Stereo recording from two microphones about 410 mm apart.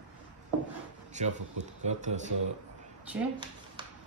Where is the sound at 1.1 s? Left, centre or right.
Centre.